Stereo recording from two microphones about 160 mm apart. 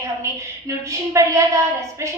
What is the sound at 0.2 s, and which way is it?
A woman's voice, 20° right (ahead or behind).